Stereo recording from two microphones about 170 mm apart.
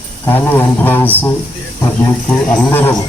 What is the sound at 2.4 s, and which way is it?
Speech, 10° left (ahead or behind).